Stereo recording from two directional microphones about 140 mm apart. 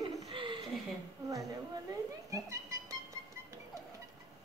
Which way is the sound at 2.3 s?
25° right (ahead or behind).